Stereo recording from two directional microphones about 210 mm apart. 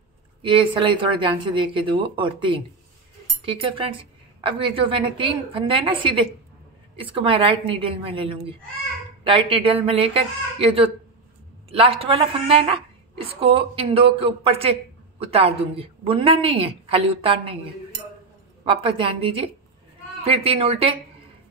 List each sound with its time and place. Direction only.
0.4 s a woman's voice: 25° right (ahead or behind)
18.6 s a woman's voice: 25° right (ahead or behind)